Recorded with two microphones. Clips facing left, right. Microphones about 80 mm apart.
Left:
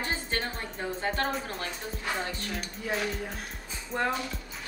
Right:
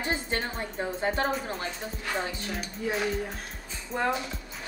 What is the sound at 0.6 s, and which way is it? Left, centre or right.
Speech, centre.